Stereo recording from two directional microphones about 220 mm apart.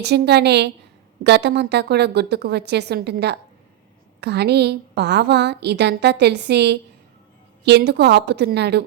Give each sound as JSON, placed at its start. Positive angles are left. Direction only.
{"t": 0.0, "sound": "a woman's voice", "side_deg": -50}